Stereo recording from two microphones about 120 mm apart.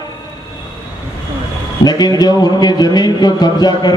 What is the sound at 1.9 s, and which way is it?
Speech, 35° left (ahead or behind).